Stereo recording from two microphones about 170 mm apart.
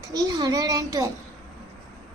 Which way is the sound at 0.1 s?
20° right (ahead or behind).